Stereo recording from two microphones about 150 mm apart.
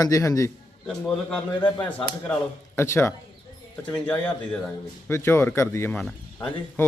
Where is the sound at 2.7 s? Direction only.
15° left (ahead or behind).